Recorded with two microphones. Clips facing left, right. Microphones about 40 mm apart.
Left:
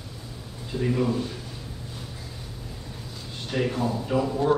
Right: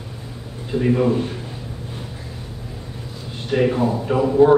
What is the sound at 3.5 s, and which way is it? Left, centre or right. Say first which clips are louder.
Speech: right 8 dB; right.